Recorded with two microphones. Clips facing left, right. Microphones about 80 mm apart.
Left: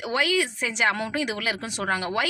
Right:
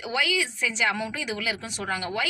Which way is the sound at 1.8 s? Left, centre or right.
Left.